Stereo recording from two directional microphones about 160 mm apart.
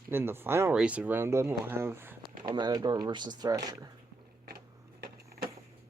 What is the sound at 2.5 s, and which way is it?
Speech, 25° right (ahead or behind).